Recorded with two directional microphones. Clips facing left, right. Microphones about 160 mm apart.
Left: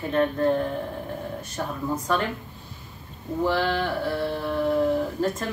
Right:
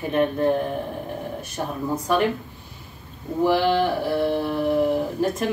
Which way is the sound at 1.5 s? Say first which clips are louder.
Right 2 dB; 15° right (ahead or behind).